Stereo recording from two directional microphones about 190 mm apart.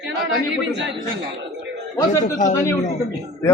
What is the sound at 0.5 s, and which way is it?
Speech, 70° right (ahead or behind).